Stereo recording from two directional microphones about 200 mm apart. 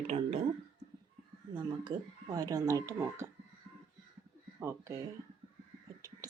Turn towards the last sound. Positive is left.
turn(degrees=-15)  # may be behind; listen again after turning